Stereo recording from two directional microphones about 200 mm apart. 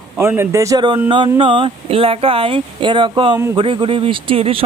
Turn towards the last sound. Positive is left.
turn(degrees=-25)  # may be behind; listen again after turning